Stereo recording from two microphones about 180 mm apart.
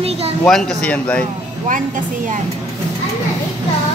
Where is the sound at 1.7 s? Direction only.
45° right (ahead or behind).